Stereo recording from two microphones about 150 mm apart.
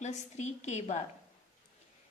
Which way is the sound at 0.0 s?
50° left (ahead or behind).